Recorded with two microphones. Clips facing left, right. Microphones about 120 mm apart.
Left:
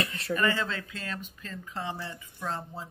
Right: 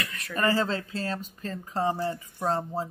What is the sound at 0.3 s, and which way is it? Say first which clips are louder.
Speech: right 4 dB; 35° right (ahead or behind).